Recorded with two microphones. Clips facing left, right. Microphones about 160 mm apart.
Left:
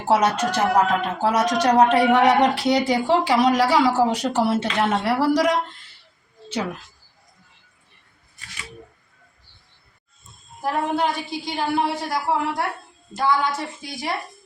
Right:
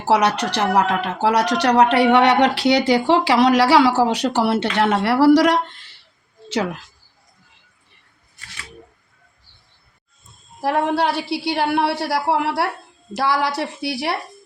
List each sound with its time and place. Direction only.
0.1 s speech: 80° right
10.6 s speech: 75° right (ahead or behind)